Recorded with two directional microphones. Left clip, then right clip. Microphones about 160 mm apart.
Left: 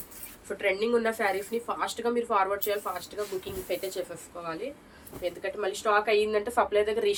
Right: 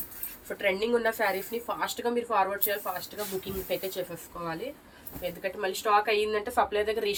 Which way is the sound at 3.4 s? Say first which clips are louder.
Even; 70° left (ahead or behind).